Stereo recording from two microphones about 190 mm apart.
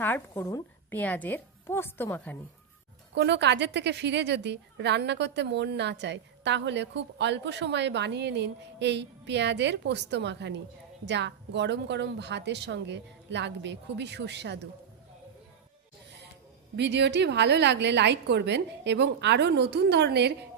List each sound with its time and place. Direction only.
0.0 s a woman's voice: 10° left (ahead or behind)
3.2 s a woman's voice: 65° right (ahead or behind)
16.7 s a woman's voice: 65° right (ahead or behind)